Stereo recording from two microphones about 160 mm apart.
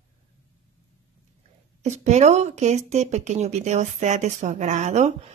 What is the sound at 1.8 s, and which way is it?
Speech, 45° right (ahead or behind).